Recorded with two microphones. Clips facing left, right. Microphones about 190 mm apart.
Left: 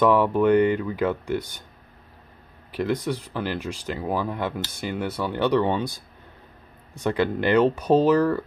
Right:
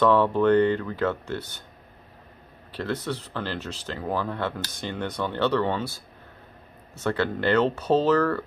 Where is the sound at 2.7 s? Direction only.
15° left (ahead or behind).